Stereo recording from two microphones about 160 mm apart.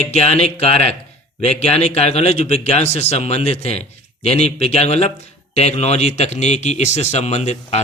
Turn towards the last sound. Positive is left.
turn(degrees=45)  # may be behind; listen again after turning